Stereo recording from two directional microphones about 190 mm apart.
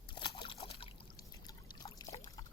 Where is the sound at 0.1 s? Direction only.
25° left (ahead or behind).